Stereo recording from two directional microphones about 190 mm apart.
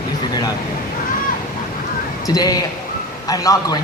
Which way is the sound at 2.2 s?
20° left (ahead or behind).